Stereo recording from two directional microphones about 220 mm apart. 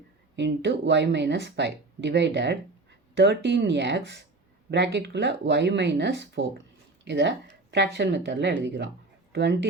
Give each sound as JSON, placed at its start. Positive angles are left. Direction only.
{"t": 0.3, "sound": "speech", "side_deg": -55}